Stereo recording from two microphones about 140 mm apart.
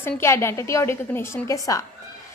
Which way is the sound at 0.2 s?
20° left (ahead or behind).